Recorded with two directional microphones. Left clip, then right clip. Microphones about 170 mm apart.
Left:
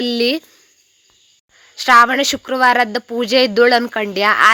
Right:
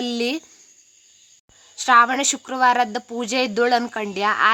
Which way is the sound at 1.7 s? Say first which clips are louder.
Left 5 dB; 20° left (ahead or behind).